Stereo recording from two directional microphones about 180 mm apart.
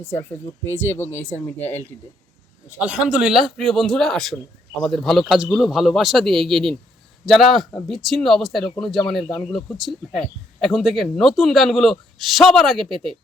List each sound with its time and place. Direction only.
0.0 s speech: 10° left (ahead or behind)
2.7 s a man's voice: 10° right (ahead or behind)